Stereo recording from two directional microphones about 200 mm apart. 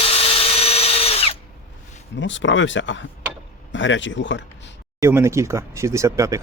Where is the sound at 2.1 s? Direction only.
65° left (ahead or behind).